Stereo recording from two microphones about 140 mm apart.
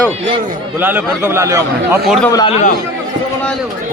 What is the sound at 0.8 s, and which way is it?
A man's voice, 15° right (ahead or behind).